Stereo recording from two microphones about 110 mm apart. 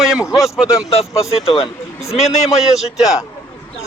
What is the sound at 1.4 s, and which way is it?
Speech, 60° left (ahead or behind).